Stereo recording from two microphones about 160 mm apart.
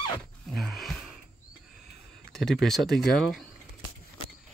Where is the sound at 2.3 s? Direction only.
Centre (ahead or behind).